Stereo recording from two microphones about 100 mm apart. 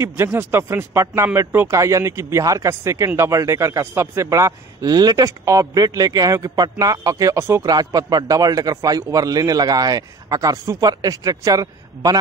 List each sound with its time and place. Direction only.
0.0 s a man's voice: 25° right (ahead or behind)
7.6 s a man's voice: 40° right (ahead or behind)